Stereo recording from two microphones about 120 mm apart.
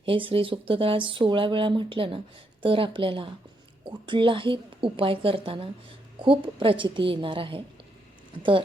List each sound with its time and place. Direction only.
0.0 s speech: 45° right (ahead or behind)